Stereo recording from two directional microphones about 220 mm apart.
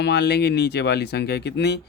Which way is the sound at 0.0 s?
50° left (ahead or behind).